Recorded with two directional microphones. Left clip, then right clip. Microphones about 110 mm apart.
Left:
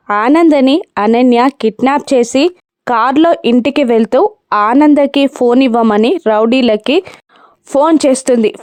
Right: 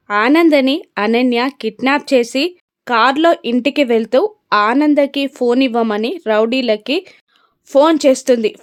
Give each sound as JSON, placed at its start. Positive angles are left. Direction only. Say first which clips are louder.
{"t": 0.1, "sound": "speech", "louder": "left 3 dB", "side_deg": 50}
{"t": 7.7, "sound": "speech", "louder": "left 1 dB", "side_deg": 45}